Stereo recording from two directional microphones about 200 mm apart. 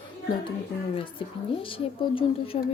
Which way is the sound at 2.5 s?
35° left (ahead or behind).